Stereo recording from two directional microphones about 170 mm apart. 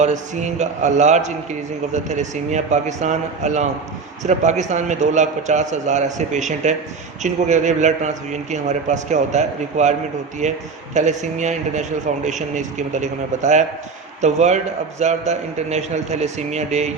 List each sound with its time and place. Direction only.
0.0 s a man's voice: 45° right (ahead or behind)